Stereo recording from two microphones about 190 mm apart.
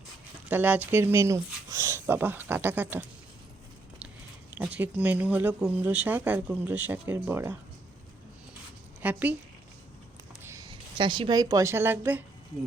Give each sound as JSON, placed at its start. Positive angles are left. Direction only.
{"t": 0.4, "sound": "speech", "side_deg": -10}
{"t": 4.5, "sound": "speech", "side_deg": -10}
{"t": 9.0, "sound": "speech", "side_deg": -10}
{"t": 10.4, "sound": "a woman's voice", "side_deg": -15}